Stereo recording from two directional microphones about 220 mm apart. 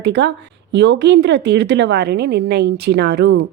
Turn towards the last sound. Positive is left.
turn(degrees=-45)  # may be behind; listen again after turning